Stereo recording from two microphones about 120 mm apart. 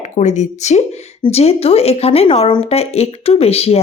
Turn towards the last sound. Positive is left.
turn(degrees=55)  # may be behind; listen again after turning